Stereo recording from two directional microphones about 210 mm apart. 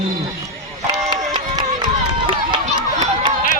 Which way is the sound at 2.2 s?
25° right (ahead or behind).